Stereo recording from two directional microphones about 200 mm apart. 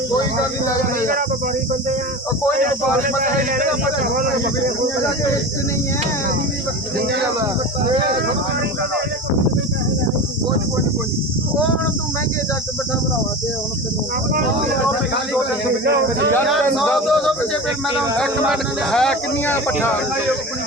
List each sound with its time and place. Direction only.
3.2 s speech: 45° right (ahead or behind)
16.7 s speech: centre (ahead or behind)